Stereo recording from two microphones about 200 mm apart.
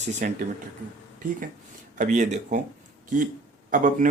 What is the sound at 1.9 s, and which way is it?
Speech, 40° right (ahead or behind).